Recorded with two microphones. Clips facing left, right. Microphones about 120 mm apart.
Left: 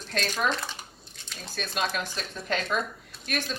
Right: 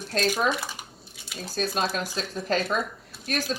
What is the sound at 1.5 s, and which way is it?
A woman's voice, 40° right (ahead or behind).